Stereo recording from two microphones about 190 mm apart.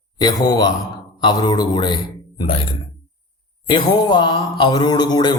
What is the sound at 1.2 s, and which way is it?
A man's voice, 20° left (ahead or behind).